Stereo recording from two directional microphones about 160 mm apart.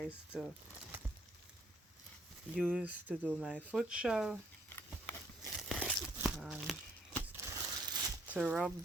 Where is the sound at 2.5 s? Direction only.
Centre (ahead or behind).